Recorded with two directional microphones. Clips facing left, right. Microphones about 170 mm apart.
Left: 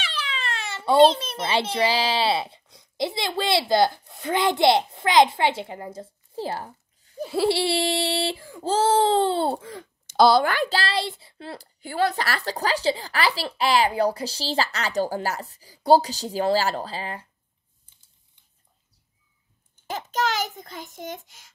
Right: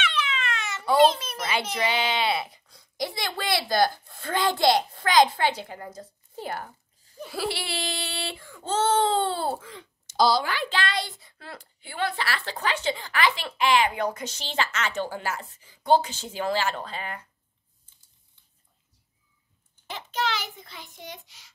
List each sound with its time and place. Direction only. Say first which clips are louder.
0.0 s a child's voice: right 3 dB; 35° left (ahead or behind)
7.2 s child singing: left 9 dB; 30° left (ahead or behind)
10.0 s a woman's voice: left 5 dB; 60° left (ahead or behind); by 17.3 s 30° left (ahead or behind)
19.9 s a child's voice: left 4 dB; 45° left (ahead or behind)